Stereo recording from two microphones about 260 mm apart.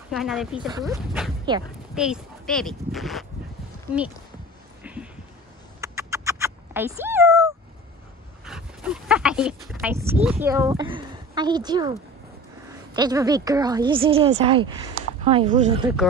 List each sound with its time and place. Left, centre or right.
0.1 s speech: centre
0.6 s a woman's voice: centre
0.9 s speech: centre
4.8 s a sound: centre
5.8 s cat: centre
8.5 s dog: centre
9.9 s a woman's voice: centre